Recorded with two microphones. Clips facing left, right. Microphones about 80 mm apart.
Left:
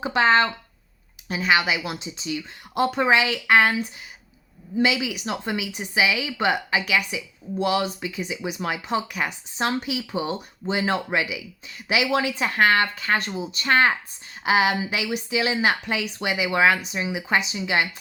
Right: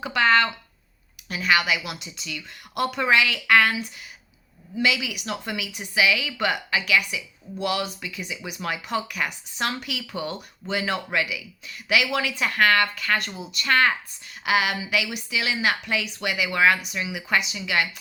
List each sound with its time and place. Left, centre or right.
0.0 s speech: left
4.8 s speech: left